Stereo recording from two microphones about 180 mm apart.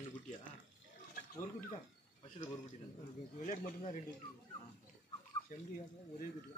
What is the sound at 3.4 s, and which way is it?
Speech, 45° left (ahead or behind).